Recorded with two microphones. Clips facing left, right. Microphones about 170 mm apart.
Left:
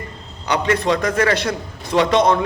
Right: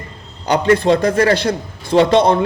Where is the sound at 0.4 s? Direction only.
35° right (ahead or behind).